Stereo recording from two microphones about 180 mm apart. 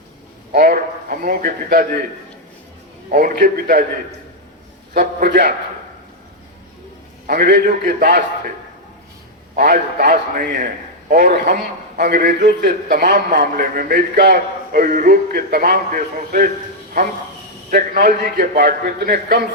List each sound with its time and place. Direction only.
0.5 s a man's voice: 55° right (ahead or behind)
3.1 s a man's voice: 50° right (ahead or behind)
4.9 s a man's voice: 60° right (ahead or behind)
7.3 s a man's voice: 65° right (ahead or behind)
9.6 s a man's voice: 60° right (ahead or behind)
17.7 s a man's voice: 55° right (ahead or behind)